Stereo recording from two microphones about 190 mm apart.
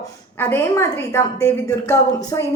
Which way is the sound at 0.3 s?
10° left (ahead or behind).